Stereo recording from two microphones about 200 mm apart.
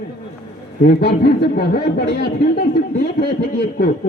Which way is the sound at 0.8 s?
50° left (ahead or behind).